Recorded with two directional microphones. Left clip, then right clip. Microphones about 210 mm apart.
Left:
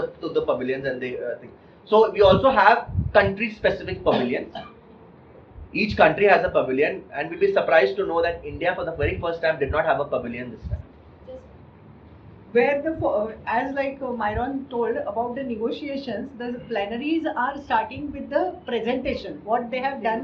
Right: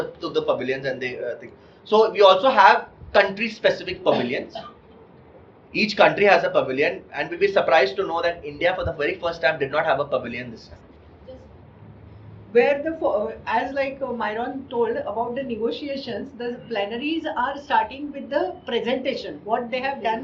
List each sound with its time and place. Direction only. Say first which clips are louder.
0.2 s a man's voice: right 1 dB; 50° right (ahead or behind)
5.7 s a man's voice: right 1 dB; 50° right (ahead or behind)
12.5 s a woman's voice: right 2 dB; 20° right (ahead or behind)